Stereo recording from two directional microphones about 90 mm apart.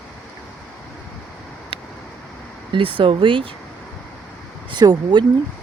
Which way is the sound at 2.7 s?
75° right (ahead or behind).